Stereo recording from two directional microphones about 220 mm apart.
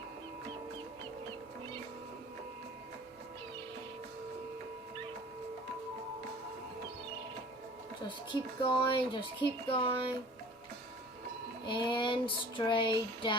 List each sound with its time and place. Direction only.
8.0 s speech: 20° left (ahead or behind)
11.6 s speech: 20° left (ahead or behind)